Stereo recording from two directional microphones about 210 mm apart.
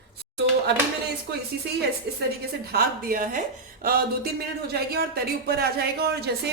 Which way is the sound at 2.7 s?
40° right (ahead or behind).